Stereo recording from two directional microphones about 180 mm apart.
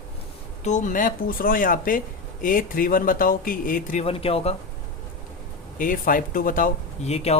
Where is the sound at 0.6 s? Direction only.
45° left (ahead or behind).